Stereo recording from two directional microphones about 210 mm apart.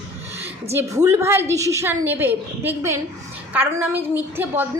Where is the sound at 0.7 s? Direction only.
15° right (ahead or behind).